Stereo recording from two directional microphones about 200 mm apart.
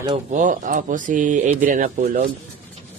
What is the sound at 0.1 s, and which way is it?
Speech, 40° right (ahead or behind).